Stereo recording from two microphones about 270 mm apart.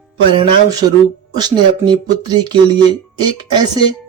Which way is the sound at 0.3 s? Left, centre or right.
Centre.